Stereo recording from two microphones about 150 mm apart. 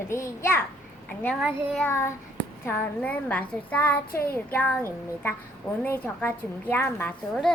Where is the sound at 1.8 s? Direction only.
15° left (ahead or behind).